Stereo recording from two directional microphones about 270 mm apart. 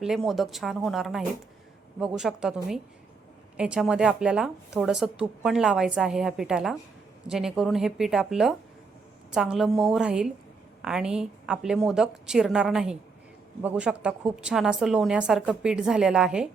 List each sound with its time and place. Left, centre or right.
0.0 s a woman's voice: centre